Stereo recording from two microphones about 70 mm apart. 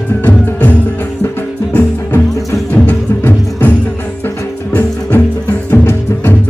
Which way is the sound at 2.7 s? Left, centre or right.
Left.